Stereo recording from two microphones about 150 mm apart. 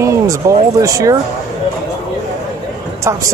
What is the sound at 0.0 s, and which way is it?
Speech, 20° right (ahead or behind).